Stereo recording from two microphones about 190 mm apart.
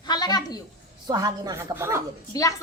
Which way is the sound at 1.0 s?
20° right (ahead or behind).